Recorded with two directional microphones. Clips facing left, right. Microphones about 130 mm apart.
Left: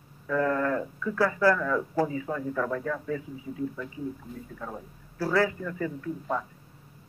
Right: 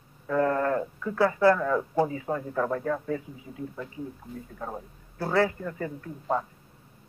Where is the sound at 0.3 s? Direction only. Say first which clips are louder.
Right 1 dB; 35° right (ahead or behind).